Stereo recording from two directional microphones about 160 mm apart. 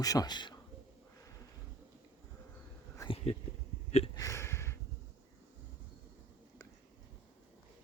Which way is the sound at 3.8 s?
40° left (ahead or behind).